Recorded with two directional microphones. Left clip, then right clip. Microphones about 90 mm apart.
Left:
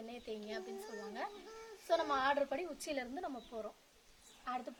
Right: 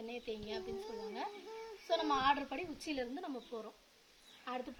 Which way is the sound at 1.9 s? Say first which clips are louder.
Right 1 dB; 40° left (ahead or behind).